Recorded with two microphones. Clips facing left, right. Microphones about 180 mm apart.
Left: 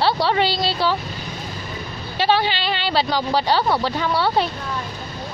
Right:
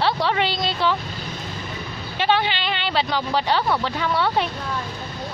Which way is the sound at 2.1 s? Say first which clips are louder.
Left 2 dB; 35° left (ahead or behind).